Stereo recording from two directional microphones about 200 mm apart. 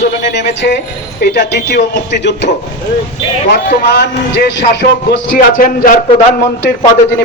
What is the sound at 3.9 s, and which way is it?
Speech, 55° left (ahead or behind).